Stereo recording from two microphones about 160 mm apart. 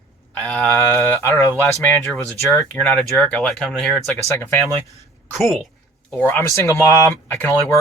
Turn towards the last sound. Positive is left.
turn(degrees=10)  # may be behind; listen again after turning